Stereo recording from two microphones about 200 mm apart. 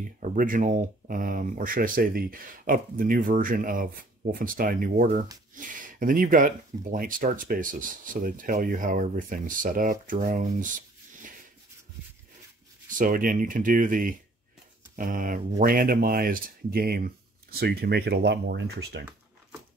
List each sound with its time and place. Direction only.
0.0 s speech: 40° right (ahead or behind)
12.9 s speech: 45° right (ahead or behind)